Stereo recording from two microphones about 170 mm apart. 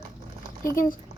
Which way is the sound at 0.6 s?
55° left (ahead or behind).